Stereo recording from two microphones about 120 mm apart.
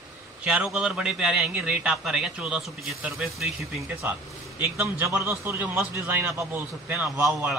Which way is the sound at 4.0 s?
15° right (ahead or behind).